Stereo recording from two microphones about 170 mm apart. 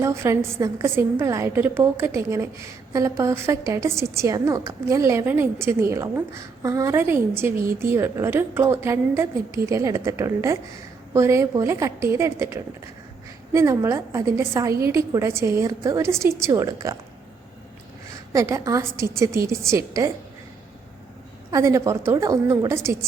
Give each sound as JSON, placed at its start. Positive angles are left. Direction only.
{"t": 0.0, "sound": "a woman's voice", "side_deg": -15}
{"t": 18.3, "sound": "a woman's voice", "side_deg": -20}
{"t": 21.5, "sound": "a woman's voice", "side_deg": -20}